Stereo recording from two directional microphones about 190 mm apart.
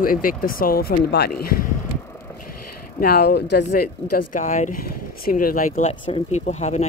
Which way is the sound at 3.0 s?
55° left (ahead or behind).